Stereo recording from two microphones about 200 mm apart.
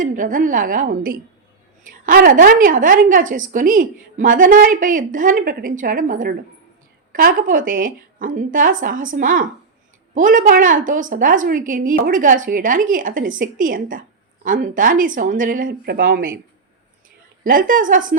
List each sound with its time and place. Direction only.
0.0 s a woman's voice: 40° right (ahead or behind)
17.4 s a woman's voice: 45° right (ahead or behind)